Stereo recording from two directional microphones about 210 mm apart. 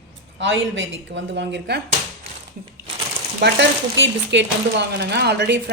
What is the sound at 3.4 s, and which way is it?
A woman's voice, 55° right (ahead or behind).